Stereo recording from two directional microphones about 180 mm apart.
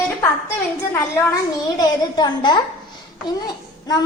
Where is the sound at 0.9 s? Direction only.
15° left (ahead or behind).